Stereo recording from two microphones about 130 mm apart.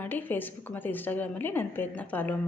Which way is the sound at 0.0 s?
15° left (ahead or behind).